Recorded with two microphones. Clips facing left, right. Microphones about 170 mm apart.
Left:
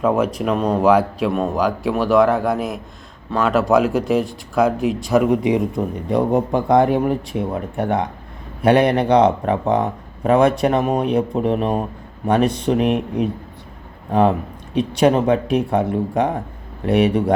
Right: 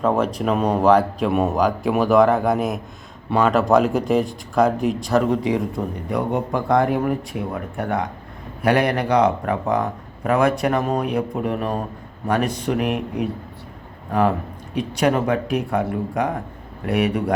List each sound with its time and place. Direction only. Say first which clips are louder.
0.0 s a man's voice: left 2 dB; 5° left (ahead or behind)
0.4 s speech: right 1 dB; 5° right (ahead or behind)
0.8 s a man's voice: left 1 dB; 5° left (ahead or behind)
1.3 s a man's voice: right 2 dB; 5° right (ahead or behind); by 17.3 s 30° left (ahead or behind)